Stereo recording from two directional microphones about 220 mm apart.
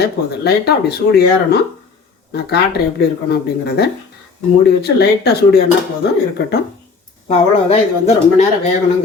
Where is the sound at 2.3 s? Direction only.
45° left (ahead or behind).